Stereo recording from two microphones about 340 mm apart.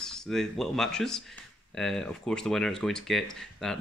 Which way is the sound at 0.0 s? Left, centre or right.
Centre.